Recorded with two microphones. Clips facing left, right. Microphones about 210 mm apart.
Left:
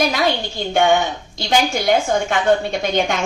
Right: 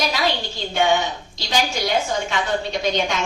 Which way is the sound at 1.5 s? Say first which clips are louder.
Left 5 dB; 55° left (ahead or behind).